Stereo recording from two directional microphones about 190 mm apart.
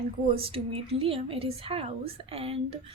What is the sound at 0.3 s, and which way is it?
A woman's voice, 30° right (ahead or behind).